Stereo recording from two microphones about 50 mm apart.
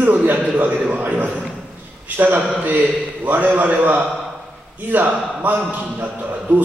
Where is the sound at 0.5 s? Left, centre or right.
Right.